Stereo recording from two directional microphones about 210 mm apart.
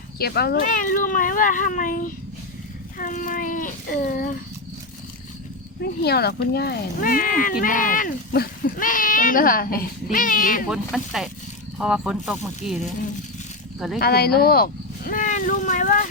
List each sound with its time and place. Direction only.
0.2 s speech: 50° left (ahead or behind)
5.8 s speech: 50° left (ahead or behind)
10.7 s speech: centre (ahead or behind)
14.0 s speech: 45° left (ahead or behind)